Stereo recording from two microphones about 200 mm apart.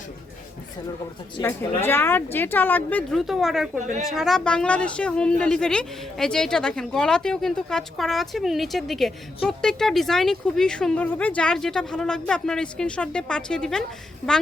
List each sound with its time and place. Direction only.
1.4 s a woman's voice: 10° left (ahead or behind)